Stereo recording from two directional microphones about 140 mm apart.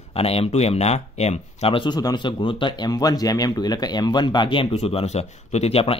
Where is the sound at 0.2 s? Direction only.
45° left (ahead or behind).